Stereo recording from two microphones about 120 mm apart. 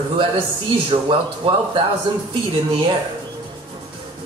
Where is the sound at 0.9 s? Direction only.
40° right (ahead or behind).